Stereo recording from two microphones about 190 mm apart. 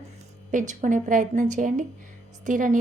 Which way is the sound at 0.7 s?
40° right (ahead or behind).